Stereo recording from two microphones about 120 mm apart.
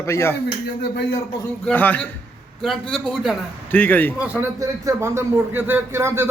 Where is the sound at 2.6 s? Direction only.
Centre (ahead or behind).